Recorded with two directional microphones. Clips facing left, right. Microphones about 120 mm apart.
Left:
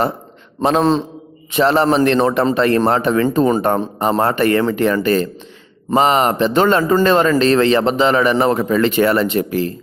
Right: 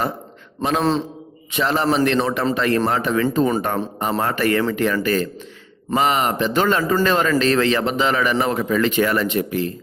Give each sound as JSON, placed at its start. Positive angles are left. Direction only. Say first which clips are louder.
{"t": 0.6, "sound": "a man's voice", "louder": "left 5 dB", "side_deg": 35}